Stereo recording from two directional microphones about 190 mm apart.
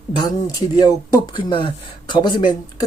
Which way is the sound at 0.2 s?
20° left (ahead or behind).